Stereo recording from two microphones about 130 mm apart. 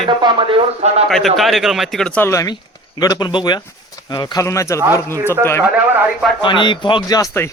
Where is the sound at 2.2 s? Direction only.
25° left (ahead or behind).